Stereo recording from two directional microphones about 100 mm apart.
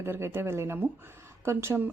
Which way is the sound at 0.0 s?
25° right (ahead or behind).